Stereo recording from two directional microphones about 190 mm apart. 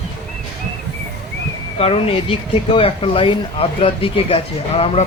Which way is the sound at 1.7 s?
30° left (ahead or behind).